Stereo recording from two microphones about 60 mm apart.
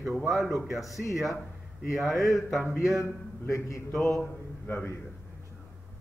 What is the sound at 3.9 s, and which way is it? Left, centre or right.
Speech, left.